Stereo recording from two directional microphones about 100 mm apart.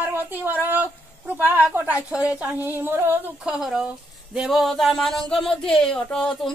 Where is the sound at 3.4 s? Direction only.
5° right (ahead or behind).